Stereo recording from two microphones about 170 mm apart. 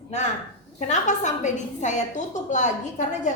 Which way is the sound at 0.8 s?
45° left (ahead or behind).